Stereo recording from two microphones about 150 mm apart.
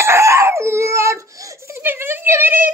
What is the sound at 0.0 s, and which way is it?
Crying, 20° right (ahead or behind).